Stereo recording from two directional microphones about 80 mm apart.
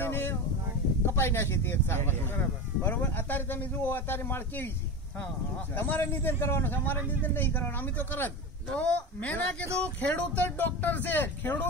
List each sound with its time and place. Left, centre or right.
0.0 s a sound: left
1.1 s speech: left
5.8 s a woman's voice: left